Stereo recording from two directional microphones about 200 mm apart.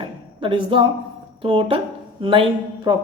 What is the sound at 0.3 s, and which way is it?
A woman's voice, 25° right (ahead or behind).